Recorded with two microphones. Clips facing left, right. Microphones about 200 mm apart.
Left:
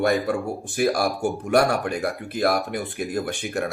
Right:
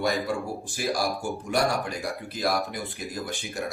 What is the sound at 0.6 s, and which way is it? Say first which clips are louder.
Speech: left 8 dB; 55° left (ahead or behind).